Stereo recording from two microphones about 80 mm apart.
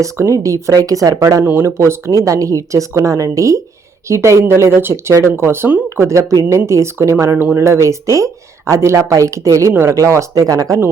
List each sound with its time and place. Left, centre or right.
0.0 s a woman's voice: right
1.5 s a woman's voice: right
6.1 s a woman's voice: right